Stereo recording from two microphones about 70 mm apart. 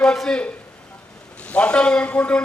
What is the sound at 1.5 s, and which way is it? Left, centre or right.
Speech, centre.